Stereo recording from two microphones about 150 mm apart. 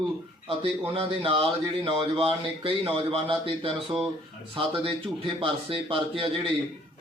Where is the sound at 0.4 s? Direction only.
40° right (ahead or behind).